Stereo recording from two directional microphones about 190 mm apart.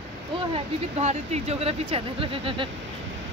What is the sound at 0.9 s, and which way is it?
Speech, 35° right (ahead or behind).